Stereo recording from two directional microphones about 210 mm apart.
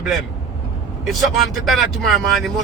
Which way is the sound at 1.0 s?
Centre (ahead or behind).